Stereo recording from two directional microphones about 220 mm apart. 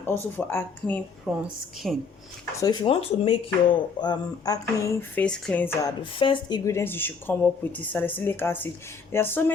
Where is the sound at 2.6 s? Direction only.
20° left (ahead or behind).